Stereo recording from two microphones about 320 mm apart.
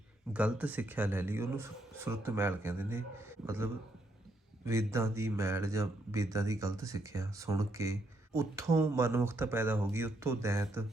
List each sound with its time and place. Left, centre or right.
0.3 s speech: centre